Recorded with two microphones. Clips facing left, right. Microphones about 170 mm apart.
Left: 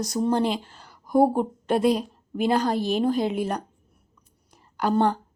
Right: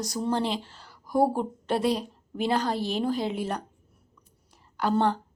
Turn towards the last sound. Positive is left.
turn(degrees=15)  # may be behind; listen again after turning